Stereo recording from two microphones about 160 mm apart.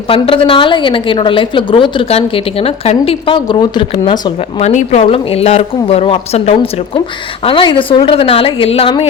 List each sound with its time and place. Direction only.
0.1 s a woman's voice: 35° left (ahead or behind)
4.4 s a woman's voice: 40° left (ahead or behind)